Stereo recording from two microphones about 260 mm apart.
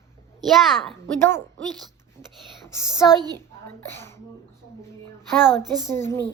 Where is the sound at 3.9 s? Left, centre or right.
Centre.